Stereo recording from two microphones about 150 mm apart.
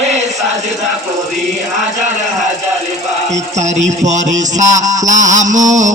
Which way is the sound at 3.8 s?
55° right (ahead or behind).